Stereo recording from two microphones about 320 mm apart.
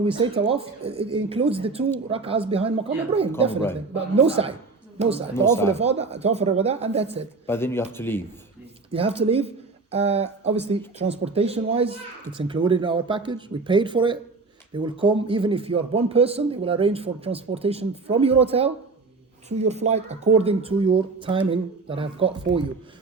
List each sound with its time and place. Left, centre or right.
0.4 s speech: centre
5.3 s speech: centre
5.7 s speech: centre
7.4 s speech: centre
8.9 s speech: centre